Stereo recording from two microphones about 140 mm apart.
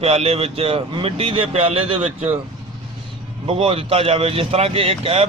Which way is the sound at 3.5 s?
40° right (ahead or behind).